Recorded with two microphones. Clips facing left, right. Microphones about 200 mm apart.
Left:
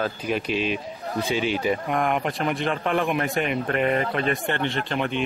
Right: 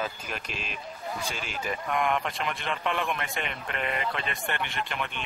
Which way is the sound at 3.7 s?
40° left (ahead or behind).